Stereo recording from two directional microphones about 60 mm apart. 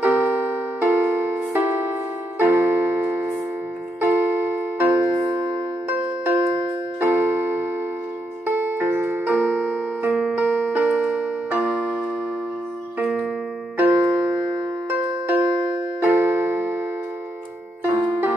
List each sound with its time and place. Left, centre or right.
0.0 s music: right
4.0 s music: right
7.0 s keyboard: right
8.5 s music: right
13.7 s music: right